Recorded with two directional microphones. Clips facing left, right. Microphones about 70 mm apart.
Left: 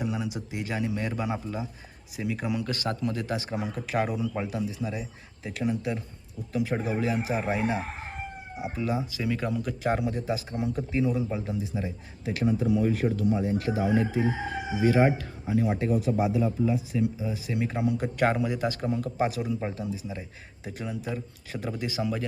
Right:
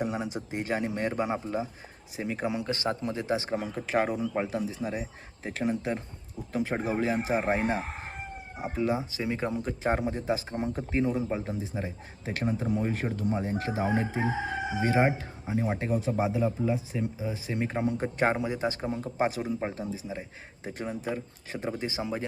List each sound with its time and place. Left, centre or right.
0.0 s speech: right
19.1 s speech: right
19.5 s speech: right